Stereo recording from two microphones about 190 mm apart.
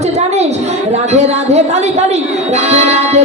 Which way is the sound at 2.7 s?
35° right (ahead or behind).